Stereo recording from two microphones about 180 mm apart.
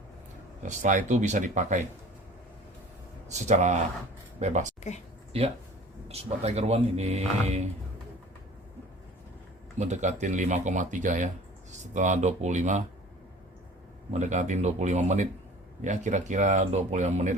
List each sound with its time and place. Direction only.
0.7 s speech: 45° right (ahead or behind)
3.3 s speech: 40° right (ahead or behind)
9.7 s speech: 40° right (ahead or behind)
14.1 s speech: 40° right (ahead or behind)